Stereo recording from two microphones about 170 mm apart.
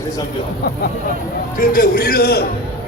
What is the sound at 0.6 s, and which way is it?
Speech, 65° left (ahead or behind).